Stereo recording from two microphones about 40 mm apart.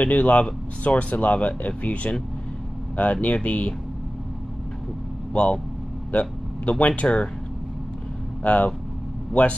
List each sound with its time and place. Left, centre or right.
0.0 s speech: left
5.3 s speech: left
8.5 s speech: left